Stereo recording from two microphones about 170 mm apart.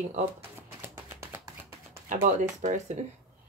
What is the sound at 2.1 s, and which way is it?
Speech, 45° right (ahead or behind).